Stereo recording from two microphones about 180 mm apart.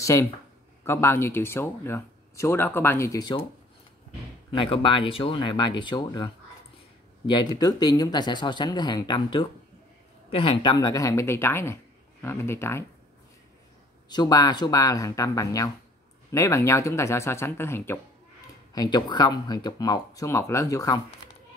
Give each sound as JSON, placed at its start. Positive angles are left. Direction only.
{"t": 0.0, "sound": "speech", "side_deg": 15}
{"t": 4.5, "sound": "speech", "side_deg": 30}
{"t": 14.0, "sound": "speech", "side_deg": 25}